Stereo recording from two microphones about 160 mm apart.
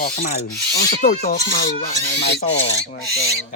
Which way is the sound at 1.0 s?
50° left (ahead or behind).